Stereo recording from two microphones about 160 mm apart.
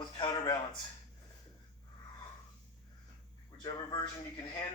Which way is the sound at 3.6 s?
25° left (ahead or behind).